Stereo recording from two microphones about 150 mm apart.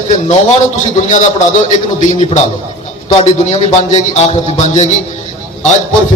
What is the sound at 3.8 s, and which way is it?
A man's voice, 50° left (ahead or behind).